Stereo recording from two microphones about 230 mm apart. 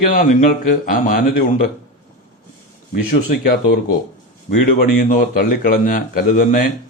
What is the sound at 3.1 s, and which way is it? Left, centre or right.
A man's voice, left.